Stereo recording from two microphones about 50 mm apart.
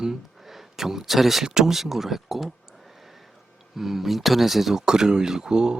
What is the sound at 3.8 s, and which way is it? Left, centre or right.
Speech, centre.